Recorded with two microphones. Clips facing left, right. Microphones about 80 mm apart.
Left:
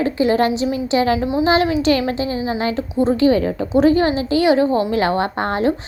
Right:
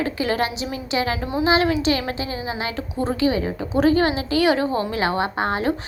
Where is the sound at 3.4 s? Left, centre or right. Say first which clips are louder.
Left 5 dB; left.